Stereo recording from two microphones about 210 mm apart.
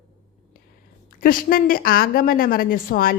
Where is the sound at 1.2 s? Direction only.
40° left (ahead or behind).